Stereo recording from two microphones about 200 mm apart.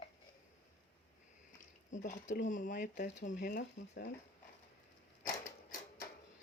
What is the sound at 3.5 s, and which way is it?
Speech, 60° left (ahead or behind).